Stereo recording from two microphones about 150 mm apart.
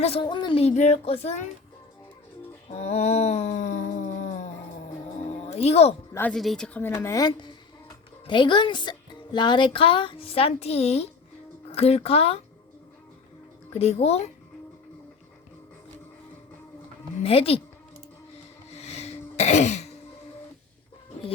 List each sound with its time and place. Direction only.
0.0 s speech: 40° left (ahead or behind)
0.6 s speech: 50° left (ahead or behind)
2.6 s a sound: 45° left (ahead or behind)
5.2 s music: 45° left (ahead or behind)
6.3 s speech: centre (ahead or behind)
7.0 s speech: 25° left (ahead or behind); by 12.4 s 40° left (ahead or behind)
13.7 s speech: 45° left (ahead or behind)
17.2 s speech: 40° left (ahead or behind)
18.7 s throat clearing: 45° left (ahead or behind)